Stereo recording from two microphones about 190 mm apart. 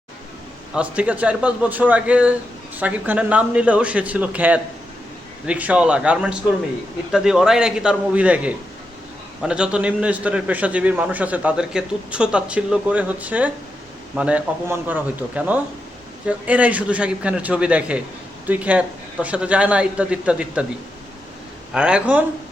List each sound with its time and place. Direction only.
0.7 s a man's voice: 5° right (ahead or behind)
21.7 s a man's voice: 5° right (ahead or behind)